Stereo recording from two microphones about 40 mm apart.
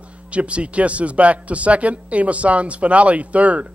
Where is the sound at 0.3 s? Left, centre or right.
Right.